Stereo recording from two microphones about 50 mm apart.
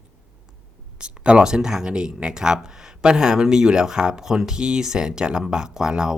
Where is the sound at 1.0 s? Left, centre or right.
Right.